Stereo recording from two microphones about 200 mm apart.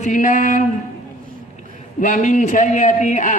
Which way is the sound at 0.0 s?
40° left (ahead or behind).